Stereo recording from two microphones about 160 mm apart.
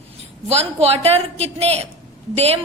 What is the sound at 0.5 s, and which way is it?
A woman's voice, 40° right (ahead or behind).